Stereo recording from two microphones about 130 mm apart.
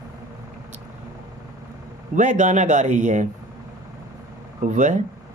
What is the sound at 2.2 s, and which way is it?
Speech, 70° right (ahead or behind).